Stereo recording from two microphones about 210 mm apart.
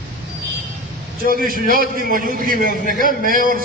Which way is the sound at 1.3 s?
40° right (ahead or behind).